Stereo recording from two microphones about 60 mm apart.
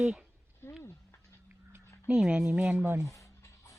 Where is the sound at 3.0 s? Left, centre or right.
Left.